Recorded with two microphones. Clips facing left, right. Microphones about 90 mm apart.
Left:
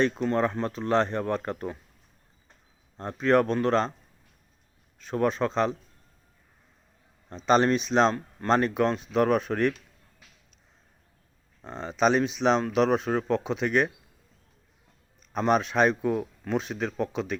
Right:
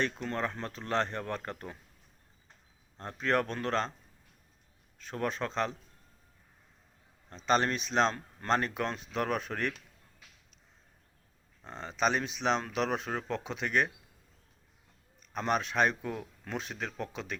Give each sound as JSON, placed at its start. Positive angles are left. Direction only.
{"t": 0.2, "sound": "speech", "side_deg": 20}
{"t": 3.0, "sound": "speech", "side_deg": 10}
{"t": 4.9, "sound": "speech", "side_deg": 10}
{"t": 7.4, "sound": "speech", "side_deg": 10}
{"t": 11.6, "sound": "speech", "side_deg": 10}
{"t": 15.4, "sound": "speech", "side_deg": 10}